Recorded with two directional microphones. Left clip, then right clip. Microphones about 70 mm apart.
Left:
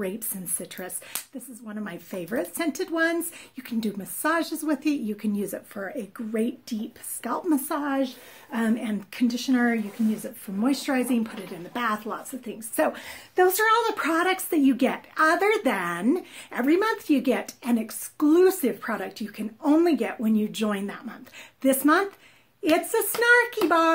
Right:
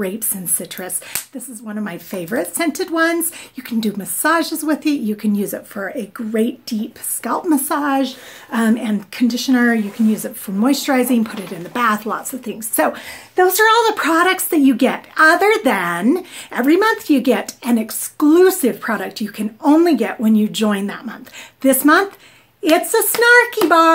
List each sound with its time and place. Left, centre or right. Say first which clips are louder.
0.0 s a woman's voice: right 8 dB; centre
7.6 s a woman's voice: right 10 dB; right
7.9 s speech: right 9 dB; right
8.6 s a woman's voice: right 7 dB; centre
10.2 s speech: right 9 dB; right
12.1 s speech: right 10 dB; right
12.5 s a woman's voice: right 7 dB; right
12.9 s a woman's voice: right 7 dB; centre
13.7 s speech: right 9 dB; right
13.9 s a woman's voice: right 9 dB; right